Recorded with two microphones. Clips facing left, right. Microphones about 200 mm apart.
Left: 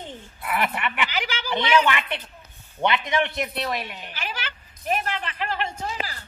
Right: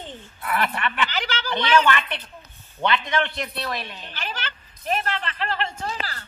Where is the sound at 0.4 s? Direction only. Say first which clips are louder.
Right 1 dB; 20° left (ahead or behind).